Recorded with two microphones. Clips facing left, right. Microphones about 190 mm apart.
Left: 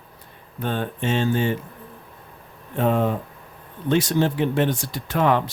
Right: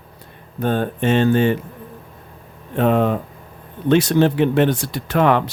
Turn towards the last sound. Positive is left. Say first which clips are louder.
# right 4 dB
turn(degrees=-70)  # may be behind; listen again after turning